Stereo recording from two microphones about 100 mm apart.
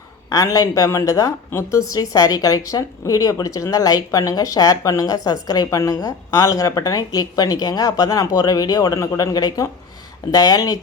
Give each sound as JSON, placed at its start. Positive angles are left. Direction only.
{"t": 0.3, "sound": "a woman's voice", "side_deg": 35}